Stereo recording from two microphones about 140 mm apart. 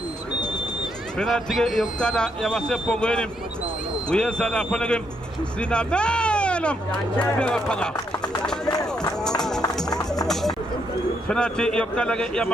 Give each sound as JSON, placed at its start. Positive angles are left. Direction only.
{"t": 1.2, "sound": "speech", "side_deg": 0}
{"t": 8.2, "sound": "run", "side_deg": 30}
{"t": 9.2, "sound": "run", "side_deg": 5}
{"t": 9.7, "sound": "music", "side_deg": 5}
{"t": 11.3, "sound": "speech", "side_deg": 5}